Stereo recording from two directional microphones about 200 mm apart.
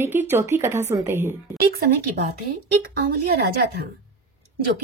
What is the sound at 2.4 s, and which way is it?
Speech, 50° right (ahead or behind).